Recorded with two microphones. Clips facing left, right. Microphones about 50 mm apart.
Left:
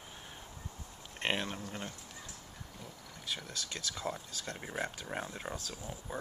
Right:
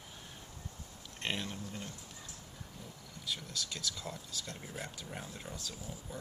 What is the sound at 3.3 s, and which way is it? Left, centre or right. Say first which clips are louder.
Speech: even; left.